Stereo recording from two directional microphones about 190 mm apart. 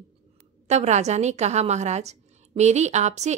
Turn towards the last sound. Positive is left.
turn(degrees=-35)  # may be behind; listen again after turning